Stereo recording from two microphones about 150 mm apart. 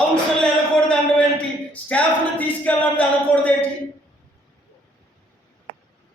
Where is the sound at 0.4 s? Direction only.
5° left (ahead or behind).